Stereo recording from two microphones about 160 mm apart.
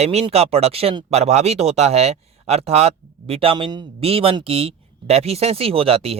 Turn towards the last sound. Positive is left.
turn(degrees=-40)  # may be behind; listen again after turning